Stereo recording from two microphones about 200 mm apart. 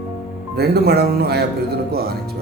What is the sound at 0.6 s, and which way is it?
A man's voice, 55° right (ahead or behind).